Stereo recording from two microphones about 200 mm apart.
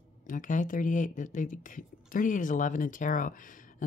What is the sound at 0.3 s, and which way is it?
Speech, 40° left (ahead or behind).